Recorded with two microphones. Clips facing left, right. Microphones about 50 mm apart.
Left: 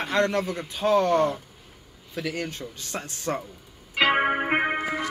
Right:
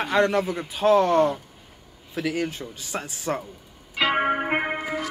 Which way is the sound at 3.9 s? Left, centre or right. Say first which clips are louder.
Left 2 dB; left.